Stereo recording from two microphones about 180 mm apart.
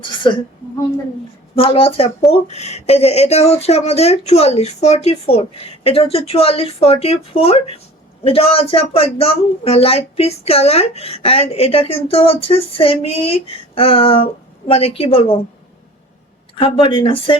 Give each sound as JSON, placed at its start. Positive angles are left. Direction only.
{"t": 0.2, "sound": "speech", "side_deg": 25}
{"t": 1.5, "sound": "speech", "side_deg": 30}
{"t": 16.6, "sound": "speech", "side_deg": 30}